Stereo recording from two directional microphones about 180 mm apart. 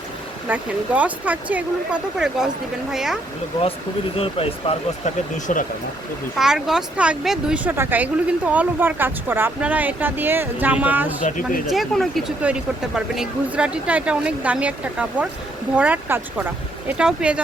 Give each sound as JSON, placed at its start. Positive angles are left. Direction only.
{"t": 0.4, "sound": "speech", "side_deg": -10}
{"t": 4.2, "sound": "speech", "side_deg": 30}
{"t": 6.3, "sound": "speech", "side_deg": 0}
{"t": 11.3, "sound": "speech", "side_deg": 45}
{"t": 11.6, "sound": "speech", "side_deg": 0}